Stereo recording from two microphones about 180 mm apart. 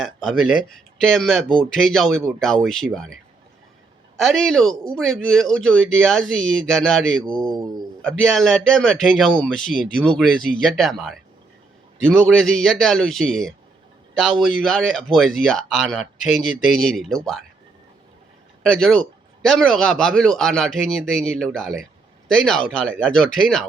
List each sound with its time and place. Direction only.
0.0 s speech: centre (ahead or behind)
4.2 s speech: centre (ahead or behind)
18.6 s speech: centre (ahead or behind)